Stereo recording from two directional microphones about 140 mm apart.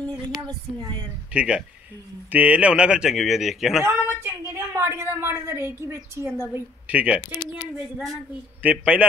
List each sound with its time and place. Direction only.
1.3 s a woman's voice: 5° right (ahead or behind)
3.8 s a woman's voice: 15° right (ahead or behind)